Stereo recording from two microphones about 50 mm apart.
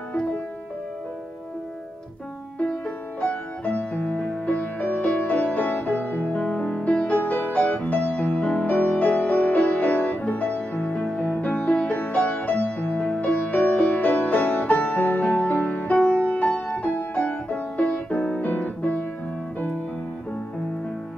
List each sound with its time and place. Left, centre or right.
3.2 s music: left
7.2 s music: left
11.7 s music: left
12.0 s music: left